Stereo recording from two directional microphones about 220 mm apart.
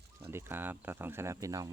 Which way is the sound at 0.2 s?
10° right (ahead or behind).